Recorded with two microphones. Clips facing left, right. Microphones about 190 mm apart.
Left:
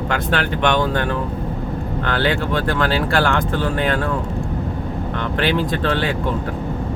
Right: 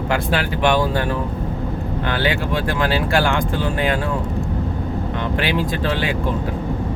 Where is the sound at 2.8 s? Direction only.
15° right (ahead or behind).